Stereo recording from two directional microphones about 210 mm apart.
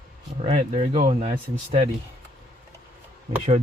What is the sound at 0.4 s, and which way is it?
Speech, 35° right (ahead or behind).